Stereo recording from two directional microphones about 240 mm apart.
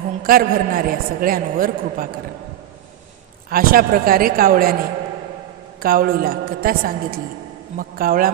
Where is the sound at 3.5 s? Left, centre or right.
Right.